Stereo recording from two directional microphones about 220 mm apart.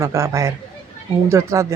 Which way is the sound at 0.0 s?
15° right (ahead or behind).